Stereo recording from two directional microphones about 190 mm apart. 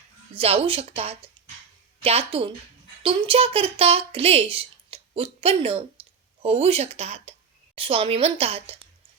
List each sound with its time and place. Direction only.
0.3 s a woman's voice: 30° right (ahead or behind)